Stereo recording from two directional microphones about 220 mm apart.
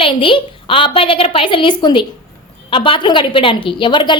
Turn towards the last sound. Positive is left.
turn(degrees=20)  # may be behind; listen again after turning